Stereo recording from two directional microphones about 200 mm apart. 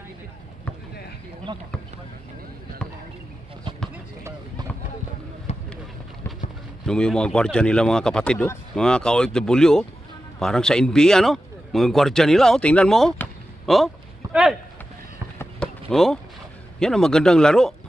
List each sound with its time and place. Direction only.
1.5 s speech: 20° right (ahead or behind)
3.9 s run: 15° right (ahead or behind)
5.5 s a sound: 35° left (ahead or behind)
6.9 s a man's voice: 5° left (ahead or behind)
15.3 s basketball bounce: 5° left (ahead or behind)
16.8 s speech: 5° left (ahead or behind)